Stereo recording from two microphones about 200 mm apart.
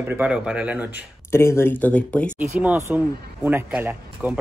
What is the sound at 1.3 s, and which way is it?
Speech, 15° left (ahead or behind).